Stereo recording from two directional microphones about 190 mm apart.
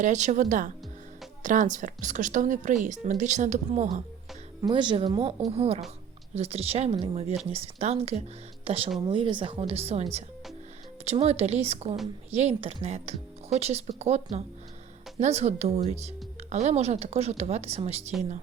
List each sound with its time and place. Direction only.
0.0 s speech: 40° right (ahead or behind)
4.6 s speech: 25° right (ahead or behind)